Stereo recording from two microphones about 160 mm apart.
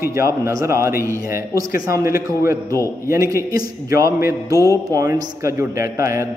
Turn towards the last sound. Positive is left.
turn(degrees=-20)  # may be behind; listen again after turning